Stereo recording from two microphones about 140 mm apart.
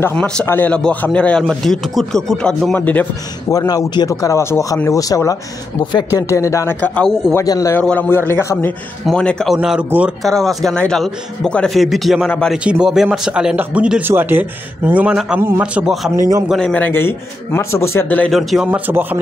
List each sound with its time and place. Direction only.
0.0 s a man's voice: 10° left (ahead or behind)
3.5 s speech: 25° left (ahead or behind)
7.3 s speech: 25° left (ahead or behind)
7.7 s a man's voice: 10° left (ahead or behind); by 10.1 s 10° right (ahead or behind)
10.2 s a man's voice: centre (ahead or behind)
16.2 s a man's voice: 20° right (ahead or behind)
16.4 s a man's voice: 5° left (ahead or behind)
18.3 s a man's voice: centre (ahead or behind)
18.7 s speech: 15° right (ahead or behind)